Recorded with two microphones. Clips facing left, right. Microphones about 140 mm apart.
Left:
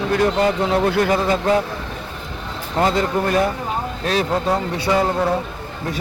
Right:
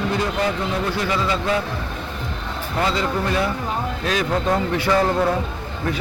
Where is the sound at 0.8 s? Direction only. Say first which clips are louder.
Left 4 dB; 55° left (ahead or behind).